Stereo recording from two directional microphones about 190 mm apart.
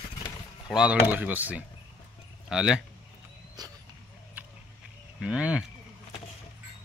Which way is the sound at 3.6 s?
20° right (ahead or behind).